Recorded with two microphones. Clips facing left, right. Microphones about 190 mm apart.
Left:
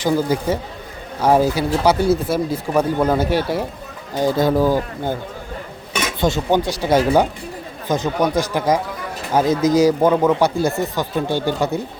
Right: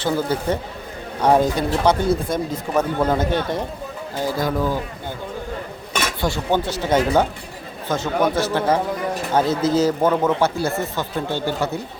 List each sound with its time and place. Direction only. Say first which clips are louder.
0.0 s speech: left 3 dB; 10° left (ahead or behind)
4.2 s speech: left 6 dB; 25° left (ahead or behind)
6.1 s speech: left 4 dB; 20° left (ahead or behind)